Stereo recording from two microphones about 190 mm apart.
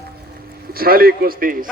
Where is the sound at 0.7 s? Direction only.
50° right (ahead or behind).